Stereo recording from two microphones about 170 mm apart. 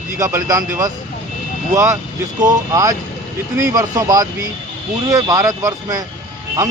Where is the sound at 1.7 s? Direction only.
20° right (ahead or behind).